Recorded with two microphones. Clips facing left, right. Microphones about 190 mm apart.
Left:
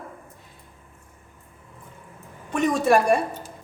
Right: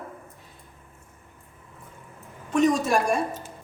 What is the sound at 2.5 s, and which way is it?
Speech, 60° left (ahead or behind).